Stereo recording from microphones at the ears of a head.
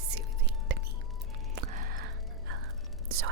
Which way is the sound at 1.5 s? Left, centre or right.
Right.